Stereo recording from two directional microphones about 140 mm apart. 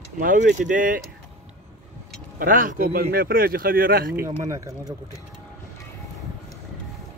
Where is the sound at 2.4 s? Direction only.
80° right.